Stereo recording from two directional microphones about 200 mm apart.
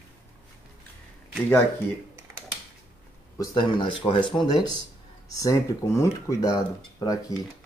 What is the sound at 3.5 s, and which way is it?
Speech, 25° left (ahead or behind).